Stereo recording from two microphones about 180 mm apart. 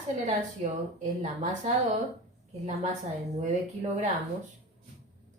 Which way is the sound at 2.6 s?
40° right (ahead or behind).